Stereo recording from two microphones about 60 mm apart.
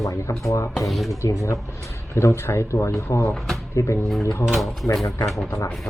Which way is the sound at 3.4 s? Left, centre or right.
Centre.